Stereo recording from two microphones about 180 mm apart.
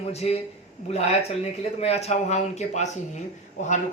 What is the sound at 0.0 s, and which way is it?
Speech, 35° left (ahead or behind).